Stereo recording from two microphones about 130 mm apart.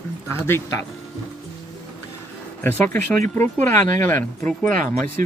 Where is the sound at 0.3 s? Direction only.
20° left (ahead or behind).